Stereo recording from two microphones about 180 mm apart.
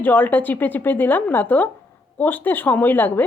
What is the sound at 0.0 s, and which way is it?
A woman's voice, 10° left (ahead or behind).